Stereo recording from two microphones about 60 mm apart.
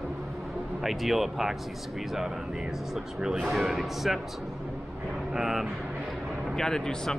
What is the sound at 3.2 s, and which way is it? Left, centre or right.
Speech, centre.